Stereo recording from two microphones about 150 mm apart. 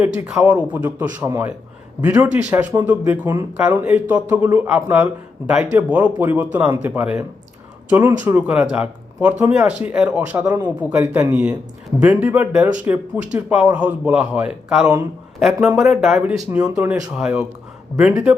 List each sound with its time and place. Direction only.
0.0 s speech: 10° right (ahead or behind)
1.2 s a man's voice: 25° right (ahead or behind)
2.0 s speech: 10° right (ahead or behind)